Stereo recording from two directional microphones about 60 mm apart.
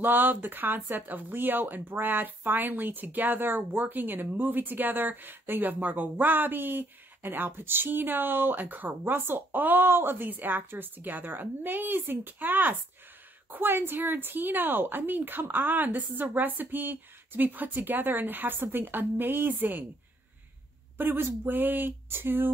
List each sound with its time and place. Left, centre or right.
0.0 s speech: right
21.0 s speech: right